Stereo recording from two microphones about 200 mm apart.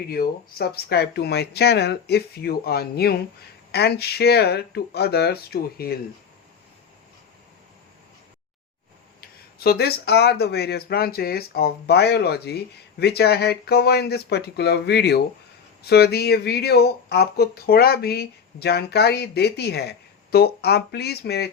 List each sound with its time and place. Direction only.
0.1 s speech: 50° left (ahead or behind)
9.6 s speech: 50° left (ahead or behind)